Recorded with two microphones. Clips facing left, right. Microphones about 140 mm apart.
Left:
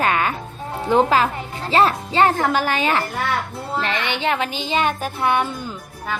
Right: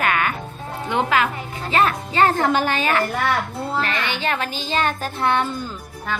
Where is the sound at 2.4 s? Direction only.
5° left (ahead or behind).